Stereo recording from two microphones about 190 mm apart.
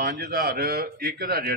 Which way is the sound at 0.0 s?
50° right (ahead or behind).